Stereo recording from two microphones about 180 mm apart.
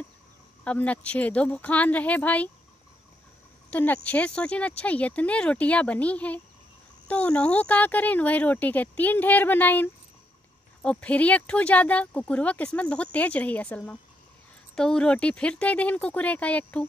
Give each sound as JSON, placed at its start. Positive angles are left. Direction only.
{"t": 0.7, "sound": "speech", "side_deg": 5}
{"t": 3.7, "sound": "speech", "side_deg": 10}